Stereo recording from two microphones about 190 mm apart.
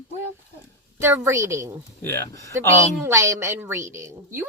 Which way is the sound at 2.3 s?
15° left (ahead or behind).